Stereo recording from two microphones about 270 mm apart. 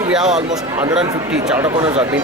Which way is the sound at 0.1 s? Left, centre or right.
Centre.